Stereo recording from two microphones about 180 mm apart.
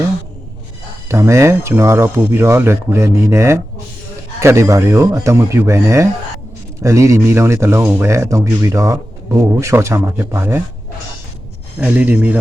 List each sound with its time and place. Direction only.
1.0 s speech: 15° right (ahead or behind)
11.8 s speech: 10° right (ahead or behind)